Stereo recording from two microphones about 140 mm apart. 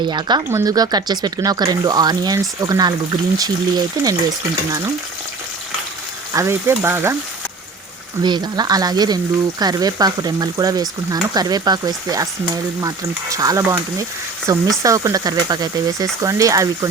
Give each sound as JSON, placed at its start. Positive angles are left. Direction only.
{"t": 0.0, "sound": "speech", "side_deg": -30}
{"t": 6.3, "sound": "frying", "side_deg": -20}
{"t": 8.2, "sound": "speech", "side_deg": -30}